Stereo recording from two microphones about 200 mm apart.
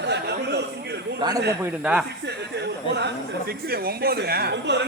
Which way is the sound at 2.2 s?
55° right (ahead or behind).